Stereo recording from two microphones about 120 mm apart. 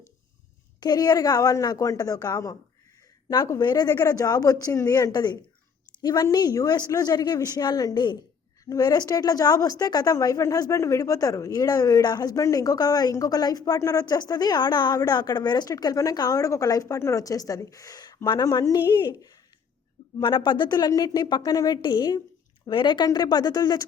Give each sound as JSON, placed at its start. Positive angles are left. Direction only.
{"t": 0.8, "sound": "a woman's voice", "side_deg": 35}